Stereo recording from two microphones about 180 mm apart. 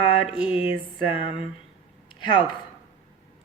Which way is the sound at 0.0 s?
25° left (ahead or behind).